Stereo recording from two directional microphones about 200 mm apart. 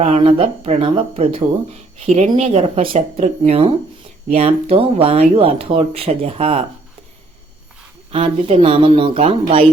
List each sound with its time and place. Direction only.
0.0 s speech: 30° right (ahead or behind)
8.1 s speech: 30° right (ahead or behind)